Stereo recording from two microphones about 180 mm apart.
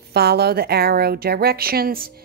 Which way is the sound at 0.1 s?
60° right (ahead or behind).